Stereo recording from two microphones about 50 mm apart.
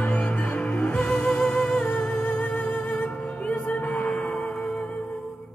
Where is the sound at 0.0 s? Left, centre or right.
Left.